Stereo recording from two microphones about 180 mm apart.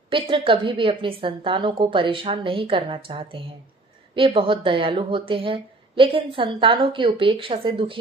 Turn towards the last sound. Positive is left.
turn(degrees=-30)  # may be behind; listen again after turning